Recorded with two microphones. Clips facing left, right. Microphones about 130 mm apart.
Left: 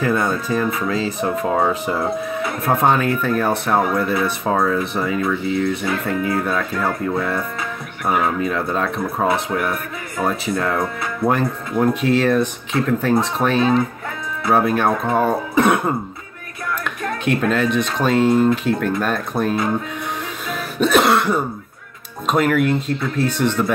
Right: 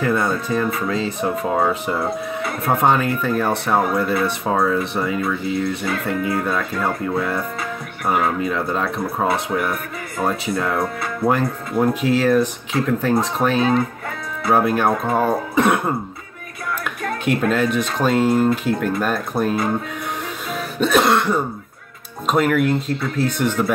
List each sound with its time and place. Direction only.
0.0 s speech: centre (ahead or behind)
17.4 s speech: 5° right (ahead or behind)
20.4 s cough: 5° left (ahead or behind)
22.2 s speech: centre (ahead or behind)